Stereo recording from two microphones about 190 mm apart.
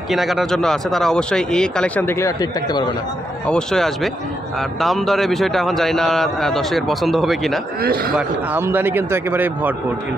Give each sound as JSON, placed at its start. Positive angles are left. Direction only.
{"t": 0.1, "sound": "a man's voice", "side_deg": 0}
{"t": 3.4, "sound": "a man's voice", "side_deg": 5}
{"t": 8.2, "sound": "speech", "side_deg": -10}